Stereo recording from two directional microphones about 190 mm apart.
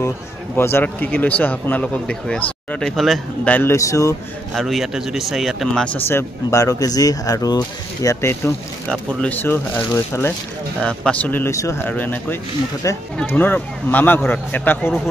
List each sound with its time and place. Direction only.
0.6 s a man's voice: 10° left (ahead or behind)
4.6 s a man's voice: centre (ahead or behind)